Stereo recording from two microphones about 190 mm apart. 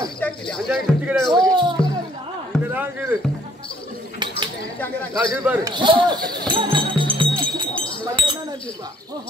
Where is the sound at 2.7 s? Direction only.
10° right (ahead or behind).